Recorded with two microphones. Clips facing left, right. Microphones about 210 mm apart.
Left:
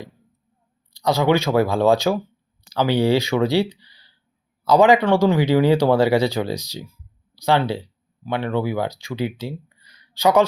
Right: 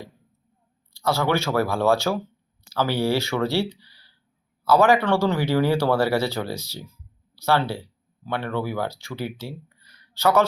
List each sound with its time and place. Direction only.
0.9 s speech: 15° left (ahead or behind)